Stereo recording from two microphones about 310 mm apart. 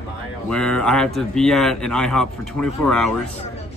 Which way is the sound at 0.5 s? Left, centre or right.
Centre.